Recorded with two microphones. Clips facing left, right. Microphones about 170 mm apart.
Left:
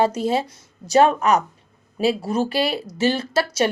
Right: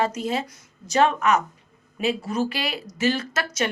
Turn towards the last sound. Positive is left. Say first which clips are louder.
# left 6 dB
turn(degrees=35)  # may be behind; listen again after turning